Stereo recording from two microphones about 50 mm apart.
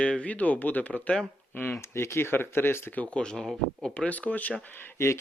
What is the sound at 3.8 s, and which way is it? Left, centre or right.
Speech, centre.